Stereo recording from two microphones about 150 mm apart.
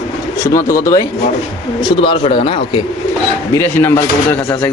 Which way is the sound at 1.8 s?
35° left (ahead or behind).